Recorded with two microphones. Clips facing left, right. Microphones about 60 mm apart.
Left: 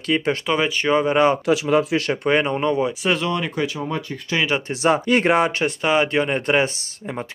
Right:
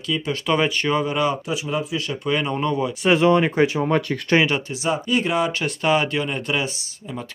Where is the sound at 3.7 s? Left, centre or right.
Right.